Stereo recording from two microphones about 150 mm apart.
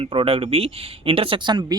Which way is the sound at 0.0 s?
40° right (ahead or behind).